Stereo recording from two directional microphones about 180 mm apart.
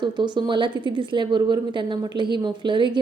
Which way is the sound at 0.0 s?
25° right (ahead or behind).